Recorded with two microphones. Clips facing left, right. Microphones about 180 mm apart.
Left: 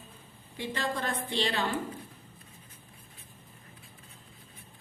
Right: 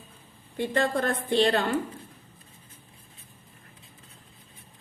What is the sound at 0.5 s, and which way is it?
A woman's voice, 55° right (ahead or behind).